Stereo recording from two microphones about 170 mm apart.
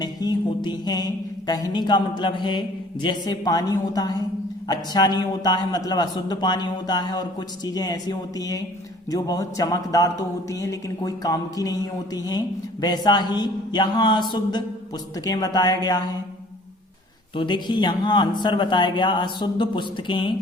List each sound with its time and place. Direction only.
0.0 s music: 25° left (ahead or behind)
17.3 s music: 25° left (ahead or behind)